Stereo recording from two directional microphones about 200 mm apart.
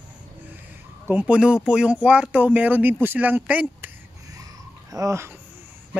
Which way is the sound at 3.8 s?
15° right (ahead or behind).